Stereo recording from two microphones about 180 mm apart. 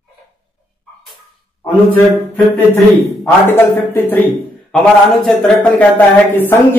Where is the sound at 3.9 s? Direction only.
10° left (ahead or behind).